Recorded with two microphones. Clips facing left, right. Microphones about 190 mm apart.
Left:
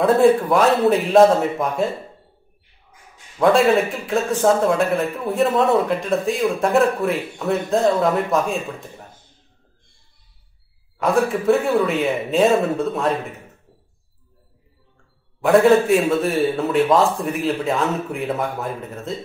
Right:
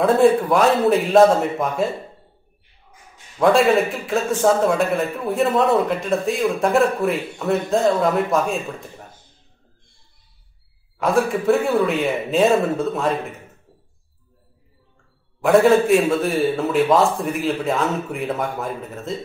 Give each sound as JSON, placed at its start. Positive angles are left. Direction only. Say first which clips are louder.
{"t": 0.0, "sound": "a man's voice", "louder": "even", "side_deg": 0}
{"t": 3.3, "sound": "a man's voice", "louder": "even", "side_deg": 0}
{"t": 11.0, "sound": "a man's voice", "louder": "even", "side_deg": 0}
{"t": 15.4, "sound": "a man's voice", "louder": "even", "side_deg": 0}